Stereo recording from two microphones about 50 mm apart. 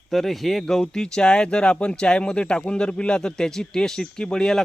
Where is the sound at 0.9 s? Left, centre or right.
Centre.